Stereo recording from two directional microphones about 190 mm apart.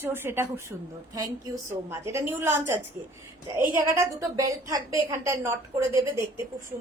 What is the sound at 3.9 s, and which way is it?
Speech, 15° right (ahead or behind).